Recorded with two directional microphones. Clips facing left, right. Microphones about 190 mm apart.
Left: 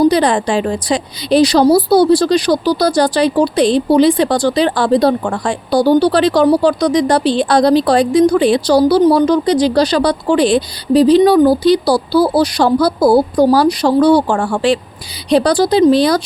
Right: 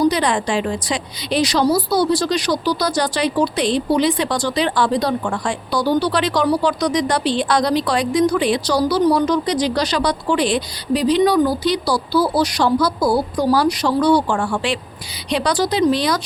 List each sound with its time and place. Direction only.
0.0 s a woman's voice: 35° left (ahead or behind)